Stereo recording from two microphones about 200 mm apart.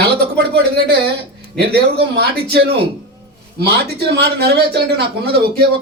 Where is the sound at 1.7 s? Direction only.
50° right (ahead or behind).